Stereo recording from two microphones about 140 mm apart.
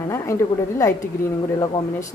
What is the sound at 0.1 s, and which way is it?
A woman's voice, 20° left (ahead or behind).